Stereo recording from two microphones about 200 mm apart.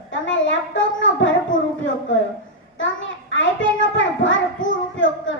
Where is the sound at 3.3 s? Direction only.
70° left (ahead or behind).